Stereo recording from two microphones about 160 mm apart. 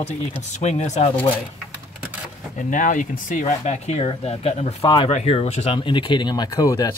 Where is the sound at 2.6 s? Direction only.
55° left (ahead or behind); by 6.9 s 20° left (ahead or behind).